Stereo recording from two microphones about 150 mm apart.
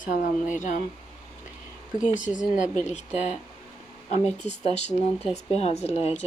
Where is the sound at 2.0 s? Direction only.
55° left (ahead or behind).